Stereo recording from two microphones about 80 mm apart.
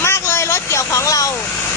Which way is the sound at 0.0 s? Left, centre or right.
Left.